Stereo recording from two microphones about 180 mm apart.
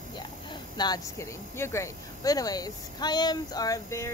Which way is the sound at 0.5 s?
25° left (ahead or behind).